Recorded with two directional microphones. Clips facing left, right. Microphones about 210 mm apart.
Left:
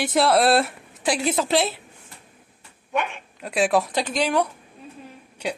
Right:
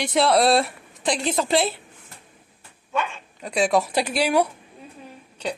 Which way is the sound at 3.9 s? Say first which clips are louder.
Right 2 dB; 10° right (ahead or behind).